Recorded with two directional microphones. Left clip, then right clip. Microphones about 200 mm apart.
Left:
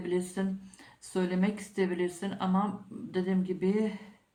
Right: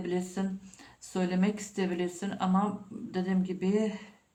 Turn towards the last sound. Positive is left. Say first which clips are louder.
# even
turn(degrees=-25)  # may be behind; listen again after turning